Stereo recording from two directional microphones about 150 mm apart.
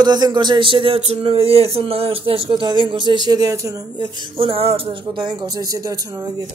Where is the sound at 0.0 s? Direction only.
30° right (ahead or behind).